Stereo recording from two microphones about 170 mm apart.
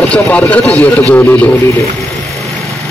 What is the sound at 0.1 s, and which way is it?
A man's voice, 10° left (ahead or behind).